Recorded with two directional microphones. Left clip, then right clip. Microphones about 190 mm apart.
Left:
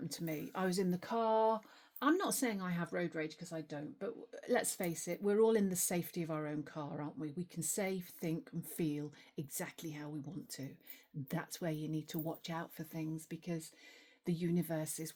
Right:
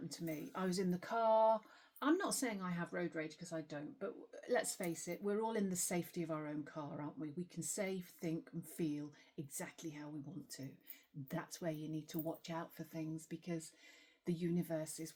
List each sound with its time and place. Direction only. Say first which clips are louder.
0.1 s speech: left 2 dB; 40° left (ahead or behind)